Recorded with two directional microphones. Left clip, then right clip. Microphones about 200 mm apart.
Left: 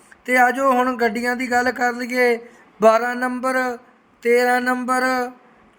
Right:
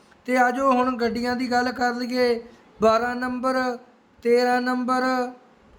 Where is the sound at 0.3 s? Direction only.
10° left (ahead or behind).